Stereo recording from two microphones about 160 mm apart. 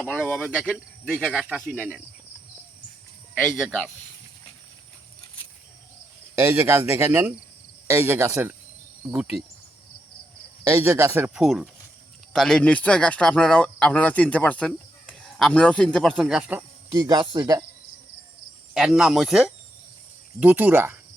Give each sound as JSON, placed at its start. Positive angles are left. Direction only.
{"t": 0.3, "sound": "speech", "side_deg": 5}
{"t": 3.3, "sound": "speech", "side_deg": 5}
{"t": 6.4, "sound": "speech", "side_deg": -15}
{"t": 10.6, "sound": "speech", "side_deg": -15}
{"t": 11.4, "sound": "speech", "side_deg": 0}
{"t": 16.9, "sound": "speech", "side_deg": -25}
{"t": 18.7, "sound": "speech", "side_deg": -5}